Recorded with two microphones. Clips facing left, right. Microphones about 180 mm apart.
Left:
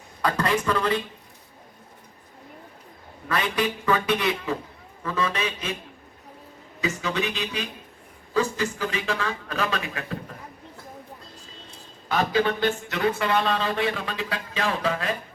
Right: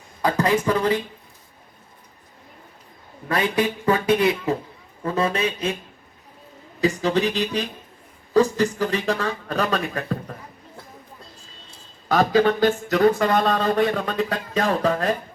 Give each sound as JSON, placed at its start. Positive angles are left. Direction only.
{"t": 0.3, "sound": "speech", "side_deg": -25}
{"t": 3.3, "sound": "speech", "side_deg": -30}
{"t": 6.8, "sound": "speech", "side_deg": -35}
{"t": 12.0, "sound": "speech", "side_deg": -40}